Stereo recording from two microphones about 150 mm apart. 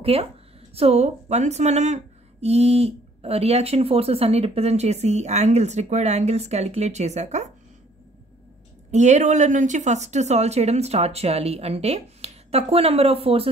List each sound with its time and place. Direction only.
0.0 s speech: 40° right (ahead or behind)
8.9 s speech: 50° right (ahead or behind)